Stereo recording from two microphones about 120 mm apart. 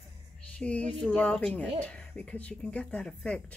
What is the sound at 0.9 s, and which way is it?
Speech, 10° left (ahead or behind).